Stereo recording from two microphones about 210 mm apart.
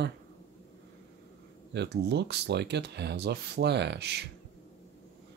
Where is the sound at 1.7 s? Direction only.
55° right (ahead or behind).